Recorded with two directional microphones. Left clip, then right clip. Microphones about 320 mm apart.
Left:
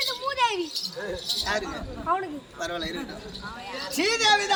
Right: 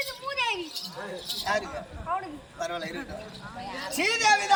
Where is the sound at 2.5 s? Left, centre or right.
Centre.